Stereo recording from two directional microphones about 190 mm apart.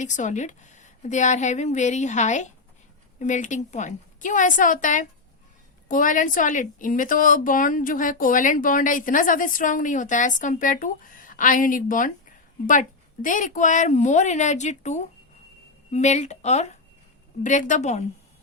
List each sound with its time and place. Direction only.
0.0 s a woman's voice: 40° left (ahead or behind)
13.2 s a woman's voice: 45° left (ahead or behind)